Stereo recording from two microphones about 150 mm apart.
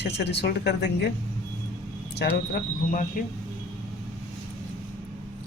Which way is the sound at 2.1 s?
90° left.